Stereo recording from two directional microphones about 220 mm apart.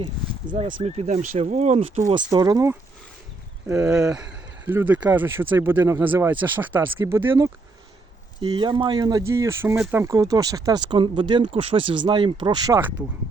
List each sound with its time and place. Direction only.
0.5 s speech: 30° right (ahead or behind)
3.7 s speech: 5° right (ahead or behind)